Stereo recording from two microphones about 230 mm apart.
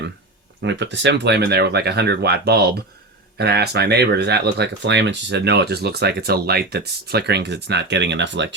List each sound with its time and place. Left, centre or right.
0.6 s speech: right